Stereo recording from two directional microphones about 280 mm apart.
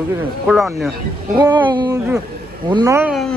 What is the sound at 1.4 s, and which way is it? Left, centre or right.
A man's voice, centre.